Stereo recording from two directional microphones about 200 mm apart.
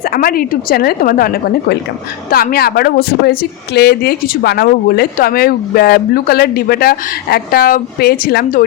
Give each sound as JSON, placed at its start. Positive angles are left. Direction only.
{"t": 0.0, "sound": "speech", "side_deg": 45}